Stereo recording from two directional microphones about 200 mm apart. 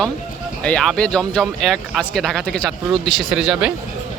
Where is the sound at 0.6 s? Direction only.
5° left (ahead or behind).